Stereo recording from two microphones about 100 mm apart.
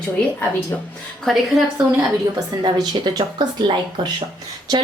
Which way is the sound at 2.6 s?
45° right (ahead or behind).